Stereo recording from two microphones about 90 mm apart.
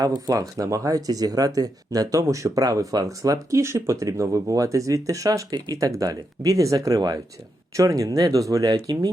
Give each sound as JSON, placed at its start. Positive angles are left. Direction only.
{"t": 0.0, "sound": "speech", "side_deg": -40}
{"t": 8.7, "sound": "speech", "side_deg": -50}